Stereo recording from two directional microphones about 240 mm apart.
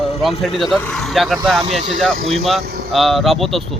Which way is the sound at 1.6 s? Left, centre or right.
Right.